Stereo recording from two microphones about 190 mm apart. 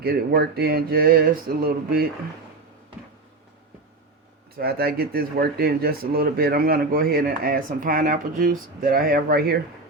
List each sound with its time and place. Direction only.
0.0 s speech: 55° right (ahead or behind)
4.5 s speech: 55° right (ahead or behind)